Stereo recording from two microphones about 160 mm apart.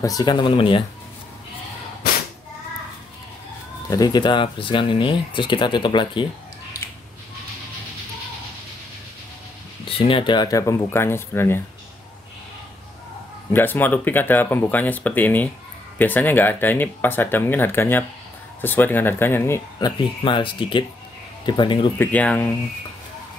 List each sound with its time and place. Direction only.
0.0 s speech: 25° left (ahead or behind)
3.9 s speech: 25° left (ahead or behind)
9.8 s speech: 35° left (ahead or behind); by 11.6 s 15° left (ahead or behind)
13.5 s speech: 10° left (ahead or behind)
20.0 s speech: 30° left (ahead or behind)
21.9 s speech: 10° left (ahead or behind)